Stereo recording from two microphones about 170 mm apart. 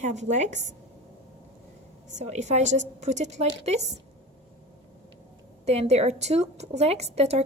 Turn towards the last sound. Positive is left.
turn(degrees=-40)  # may be behind; listen again after turning